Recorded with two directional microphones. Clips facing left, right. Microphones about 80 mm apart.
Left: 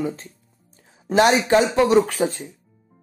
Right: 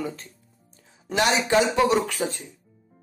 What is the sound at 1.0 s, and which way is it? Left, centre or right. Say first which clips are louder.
Speech: left 6 dB; left.